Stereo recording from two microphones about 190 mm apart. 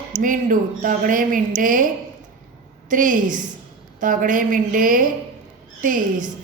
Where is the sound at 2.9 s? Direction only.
45° right (ahead or behind).